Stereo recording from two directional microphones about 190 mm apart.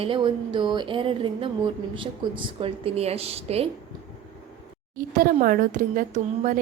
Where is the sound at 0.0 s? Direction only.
25° right (ahead or behind).